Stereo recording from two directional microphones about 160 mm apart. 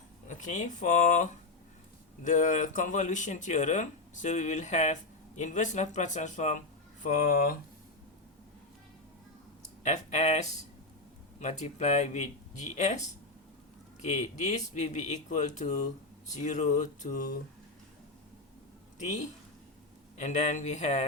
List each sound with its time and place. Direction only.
0.3 s speech: 50° left (ahead or behind)
9.8 s speech: 45° left (ahead or behind)
14.0 s speech: 45° left (ahead or behind)
18.9 s speech: 50° left (ahead or behind)